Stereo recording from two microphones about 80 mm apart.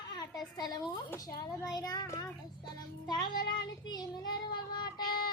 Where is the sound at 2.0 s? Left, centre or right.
Left.